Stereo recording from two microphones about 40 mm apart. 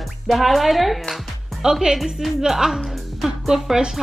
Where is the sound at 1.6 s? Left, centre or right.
Centre.